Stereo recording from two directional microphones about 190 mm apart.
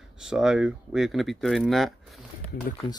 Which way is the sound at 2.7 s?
50° left (ahead or behind).